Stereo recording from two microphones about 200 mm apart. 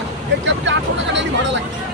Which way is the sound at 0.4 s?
65° right (ahead or behind).